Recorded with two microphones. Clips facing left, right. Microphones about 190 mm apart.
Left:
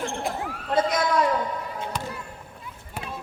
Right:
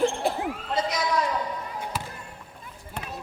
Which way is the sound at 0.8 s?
55° left (ahead or behind).